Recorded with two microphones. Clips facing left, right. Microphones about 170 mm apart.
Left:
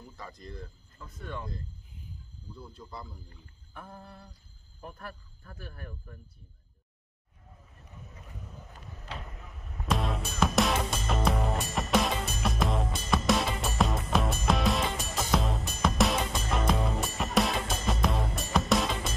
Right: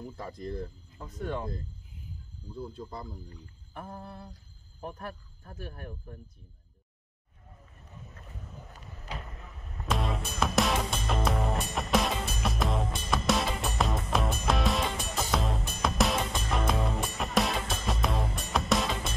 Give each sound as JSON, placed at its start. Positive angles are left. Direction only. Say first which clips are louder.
{"t": 0.4, "sound": "speech", "louder": "right 8 dB", "side_deg": -55}
{"t": 2.6, "sound": "speech", "louder": "right 5 dB", "side_deg": -50}
{"t": 4.0, "sound": "a sound", "louder": "right 5 dB", "side_deg": -55}
{"t": 9.8, "sound": "music", "louder": "left 1 dB", "side_deg": 0}